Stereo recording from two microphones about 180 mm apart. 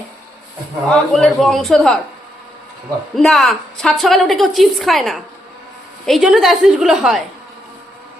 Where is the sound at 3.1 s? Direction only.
Centre (ahead or behind).